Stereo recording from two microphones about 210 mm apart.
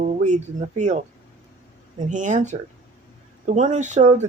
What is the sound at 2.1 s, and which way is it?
Speech, 35° right (ahead or behind).